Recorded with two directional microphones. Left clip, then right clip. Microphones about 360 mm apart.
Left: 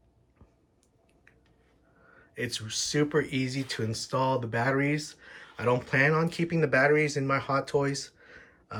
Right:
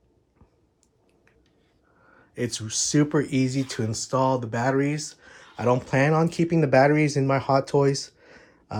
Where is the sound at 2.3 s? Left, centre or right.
Centre.